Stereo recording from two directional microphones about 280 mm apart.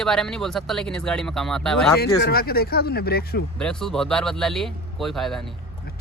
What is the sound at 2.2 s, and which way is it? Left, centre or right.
Speech, left.